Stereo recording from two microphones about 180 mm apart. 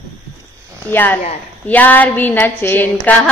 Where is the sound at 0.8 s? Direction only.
10° left (ahead or behind).